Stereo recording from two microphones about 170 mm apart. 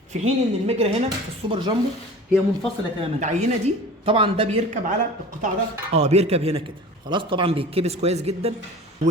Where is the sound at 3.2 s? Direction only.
45° right (ahead or behind).